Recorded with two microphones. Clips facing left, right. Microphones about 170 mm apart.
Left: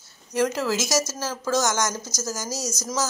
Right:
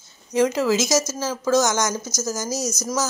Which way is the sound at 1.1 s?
15° right (ahead or behind).